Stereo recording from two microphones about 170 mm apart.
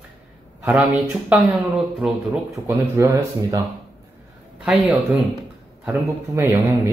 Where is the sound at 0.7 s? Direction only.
5° right (ahead or behind).